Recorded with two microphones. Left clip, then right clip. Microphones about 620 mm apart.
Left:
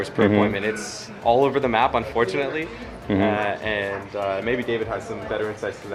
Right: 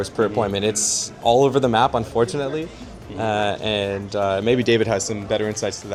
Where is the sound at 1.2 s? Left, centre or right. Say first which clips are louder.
Right 2 dB; right.